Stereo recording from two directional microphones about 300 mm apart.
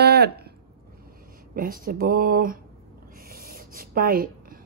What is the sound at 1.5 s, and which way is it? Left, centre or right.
A woman's voice, right.